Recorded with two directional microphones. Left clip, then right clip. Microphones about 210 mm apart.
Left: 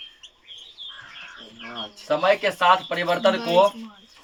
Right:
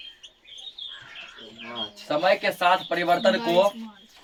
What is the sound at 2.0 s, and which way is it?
Speech, 20° left (ahead or behind).